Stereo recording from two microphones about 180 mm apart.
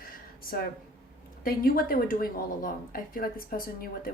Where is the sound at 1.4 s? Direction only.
55° left (ahead or behind).